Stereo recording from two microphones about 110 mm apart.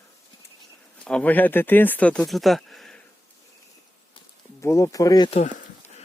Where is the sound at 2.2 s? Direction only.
Centre (ahead or behind).